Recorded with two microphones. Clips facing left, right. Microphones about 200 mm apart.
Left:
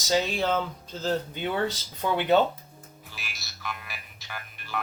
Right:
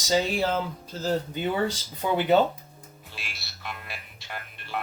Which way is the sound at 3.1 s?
25° right (ahead or behind).